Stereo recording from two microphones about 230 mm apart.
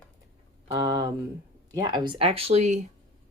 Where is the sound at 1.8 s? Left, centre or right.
Centre.